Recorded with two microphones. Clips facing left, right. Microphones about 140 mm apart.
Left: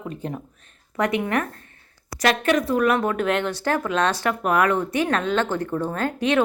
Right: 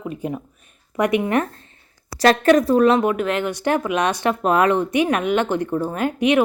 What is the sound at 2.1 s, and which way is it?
Speech, 40° right (ahead or behind).